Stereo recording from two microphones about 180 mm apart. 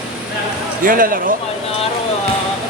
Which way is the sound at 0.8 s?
50° right (ahead or behind).